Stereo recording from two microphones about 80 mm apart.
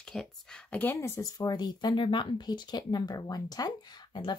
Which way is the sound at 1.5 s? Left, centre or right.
Left.